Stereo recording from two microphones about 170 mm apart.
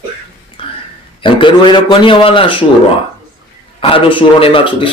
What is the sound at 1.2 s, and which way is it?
A man's voice, 30° left (ahead or behind).